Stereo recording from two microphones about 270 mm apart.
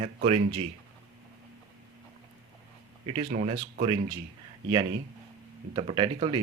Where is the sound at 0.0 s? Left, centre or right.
Right.